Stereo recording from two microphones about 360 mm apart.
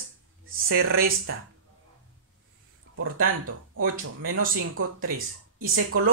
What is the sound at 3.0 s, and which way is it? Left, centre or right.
Speech, right.